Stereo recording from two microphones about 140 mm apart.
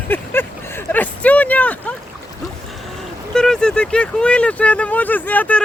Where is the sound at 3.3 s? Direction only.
5° left (ahead or behind).